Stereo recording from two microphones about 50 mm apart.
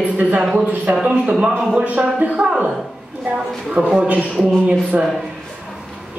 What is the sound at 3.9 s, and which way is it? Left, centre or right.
Speech, right.